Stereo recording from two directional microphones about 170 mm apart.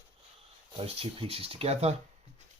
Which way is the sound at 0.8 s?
35° right (ahead or behind).